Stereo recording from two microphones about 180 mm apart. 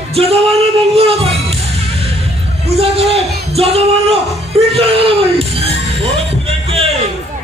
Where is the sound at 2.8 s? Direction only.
35° right (ahead or behind).